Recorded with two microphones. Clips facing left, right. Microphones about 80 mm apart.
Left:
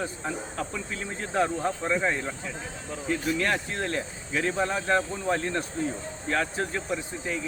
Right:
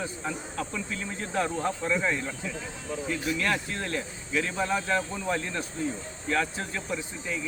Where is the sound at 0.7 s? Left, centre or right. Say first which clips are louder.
Even; left.